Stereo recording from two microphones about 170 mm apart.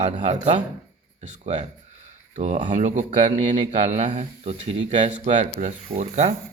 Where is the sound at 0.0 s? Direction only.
40° right (ahead or behind).